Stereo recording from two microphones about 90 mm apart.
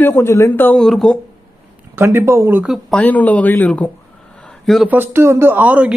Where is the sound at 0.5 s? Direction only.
20° left (ahead or behind).